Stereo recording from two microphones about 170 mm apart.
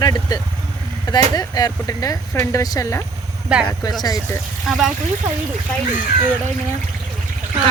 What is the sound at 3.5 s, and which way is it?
Speech, 5° right (ahead or behind).